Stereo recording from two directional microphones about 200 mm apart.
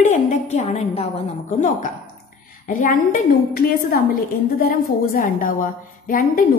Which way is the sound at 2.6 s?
40° left (ahead or behind).